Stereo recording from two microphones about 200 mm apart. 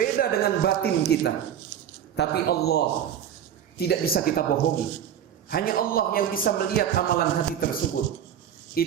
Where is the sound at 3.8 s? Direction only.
55° left (ahead or behind).